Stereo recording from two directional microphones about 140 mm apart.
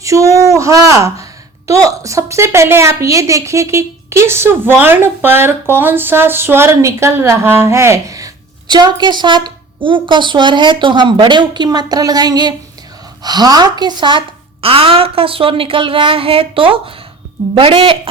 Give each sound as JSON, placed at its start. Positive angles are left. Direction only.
{"t": 0.0, "sound": "a woman's voice", "side_deg": -20}